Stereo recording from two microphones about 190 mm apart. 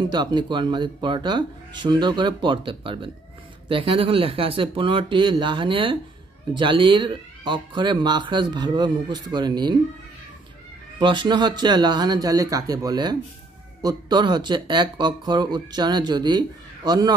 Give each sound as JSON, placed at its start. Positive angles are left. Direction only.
{"t": 0.0, "sound": "speech", "side_deg": -25}
{"t": 11.0, "sound": "speech", "side_deg": -25}